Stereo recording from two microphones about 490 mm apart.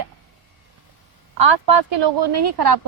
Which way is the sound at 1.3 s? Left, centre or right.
Right.